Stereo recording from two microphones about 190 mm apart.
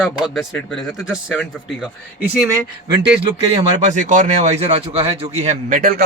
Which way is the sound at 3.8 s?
40° right (ahead or behind).